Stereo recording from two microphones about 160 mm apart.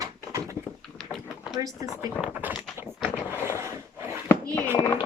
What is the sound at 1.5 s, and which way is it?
Speech, 20° right (ahead or behind).